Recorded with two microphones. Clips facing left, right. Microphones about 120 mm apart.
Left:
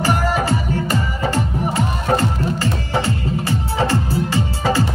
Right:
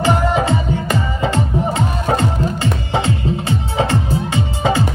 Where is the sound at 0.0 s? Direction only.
20° right (ahead or behind).